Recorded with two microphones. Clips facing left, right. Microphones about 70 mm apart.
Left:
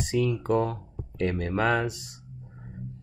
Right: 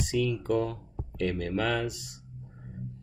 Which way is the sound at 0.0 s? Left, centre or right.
Left.